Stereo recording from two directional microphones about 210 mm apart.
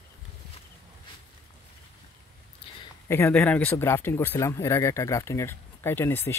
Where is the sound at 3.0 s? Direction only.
10° left (ahead or behind).